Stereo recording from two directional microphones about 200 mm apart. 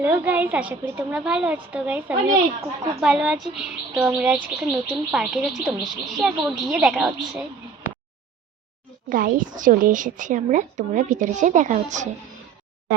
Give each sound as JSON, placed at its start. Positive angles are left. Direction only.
{"t": 0.0, "sound": "a woman's voice", "side_deg": -10}
{"t": 9.0, "sound": "a woman's voice", "side_deg": -45}